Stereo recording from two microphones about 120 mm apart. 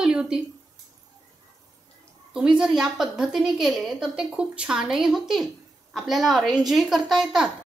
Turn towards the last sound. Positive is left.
turn(degrees=-5)  # may be behind; listen again after turning